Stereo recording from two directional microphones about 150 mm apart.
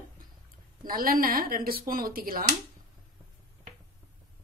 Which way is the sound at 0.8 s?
70° right (ahead or behind).